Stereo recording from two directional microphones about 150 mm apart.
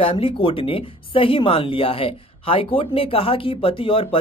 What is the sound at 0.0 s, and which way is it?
A woman's voice, 35° left (ahead or behind).